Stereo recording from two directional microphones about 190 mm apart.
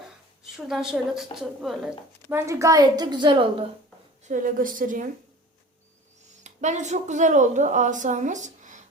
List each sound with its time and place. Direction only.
0.5 s a woman's voice: centre (ahead or behind)
2.3 s a woman's voice: 15° right (ahead or behind)
4.2 s a woman's voice: 45° right (ahead or behind)
6.4 s a woman's voice: 40° right (ahead or behind)